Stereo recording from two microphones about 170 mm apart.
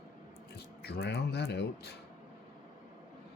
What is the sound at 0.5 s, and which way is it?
Speech, 70° left (ahead or behind).